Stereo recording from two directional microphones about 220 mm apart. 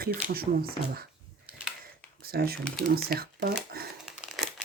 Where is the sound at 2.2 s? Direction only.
45° right (ahead or behind).